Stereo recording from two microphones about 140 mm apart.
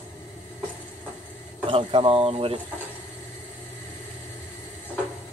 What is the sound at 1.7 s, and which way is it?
Speech, 35° right (ahead or behind).